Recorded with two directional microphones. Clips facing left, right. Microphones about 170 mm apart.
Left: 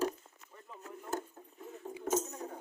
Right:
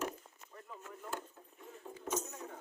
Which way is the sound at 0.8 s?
35° left (ahead or behind).